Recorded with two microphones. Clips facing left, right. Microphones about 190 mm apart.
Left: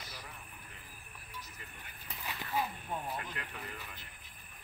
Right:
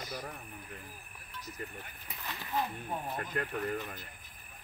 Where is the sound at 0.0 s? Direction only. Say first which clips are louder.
Right 9 dB; 45° right (ahead or behind).